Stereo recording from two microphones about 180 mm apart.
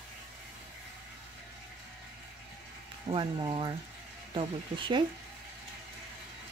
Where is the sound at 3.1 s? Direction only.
25° right (ahead or behind).